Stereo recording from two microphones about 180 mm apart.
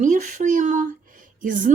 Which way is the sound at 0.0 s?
45° right (ahead or behind).